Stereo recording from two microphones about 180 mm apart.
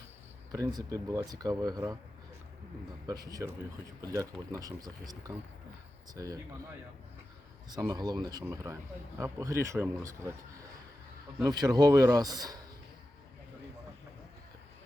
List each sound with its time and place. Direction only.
0.5 s speech: 20° right (ahead or behind)
3.1 s a man's voice: 20° right (ahead or behind)
7.7 s a man's voice: 20° right (ahead or behind)
11.4 s speech: 20° right (ahead or behind)